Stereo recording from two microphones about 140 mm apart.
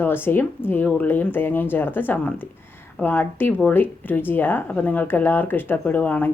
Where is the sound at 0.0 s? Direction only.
15° left (ahead or behind).